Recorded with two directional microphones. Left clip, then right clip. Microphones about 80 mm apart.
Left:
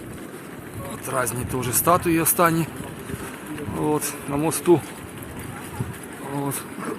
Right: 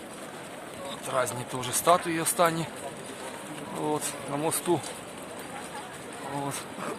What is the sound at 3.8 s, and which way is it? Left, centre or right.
Speech, left.